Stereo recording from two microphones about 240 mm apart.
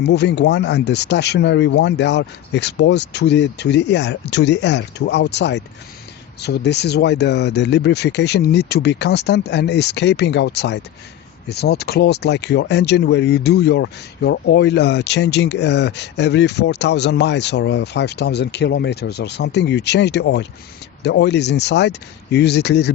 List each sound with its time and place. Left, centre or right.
0.0 s speech: left